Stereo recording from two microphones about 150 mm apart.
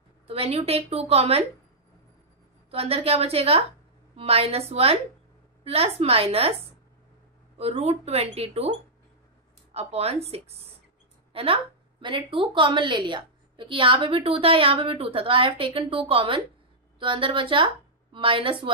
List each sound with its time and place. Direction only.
0.3 s a woman's voice: 40° right (ahead or behind)
2.7 s a woman's voice: 40° right (ahead or behind)
7.5 s a woman's voice: 45° right (ahead or behind)
9.8 s a woman's voice: 40° right (ahead or behind)